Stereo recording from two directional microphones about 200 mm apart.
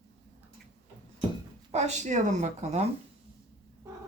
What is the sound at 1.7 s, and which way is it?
Speech, 35° right (ahead or behind).